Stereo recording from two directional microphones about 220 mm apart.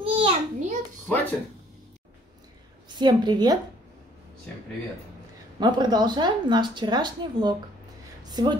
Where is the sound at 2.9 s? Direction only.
20° right (ahead or behind).